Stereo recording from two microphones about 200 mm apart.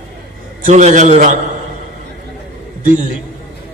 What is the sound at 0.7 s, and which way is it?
Speech, 35° right (ahead or behind).